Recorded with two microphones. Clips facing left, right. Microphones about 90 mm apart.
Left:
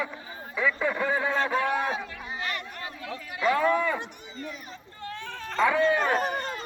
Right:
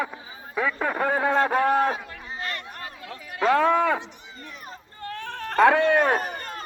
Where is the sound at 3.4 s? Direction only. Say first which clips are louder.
Right 4 dB; 65° right (ahead or behind).